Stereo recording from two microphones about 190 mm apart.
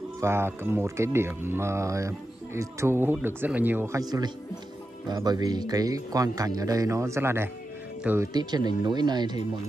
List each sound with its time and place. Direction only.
0.2 s speech: 10° right (ahead or behind)
8.3 s speech: 20° right (ahead or behind)